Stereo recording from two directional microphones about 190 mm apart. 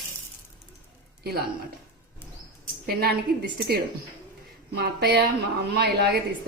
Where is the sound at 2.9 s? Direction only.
55° right (ahead or behind).